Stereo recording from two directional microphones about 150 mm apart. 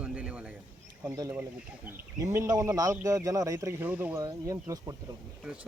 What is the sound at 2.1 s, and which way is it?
A man's voice, 20° right (ahead or behind).